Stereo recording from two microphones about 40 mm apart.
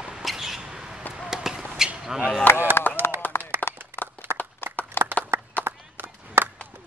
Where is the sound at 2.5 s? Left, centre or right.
Left.